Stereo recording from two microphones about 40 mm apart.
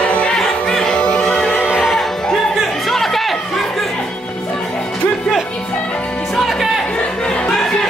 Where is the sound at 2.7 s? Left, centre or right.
Centre.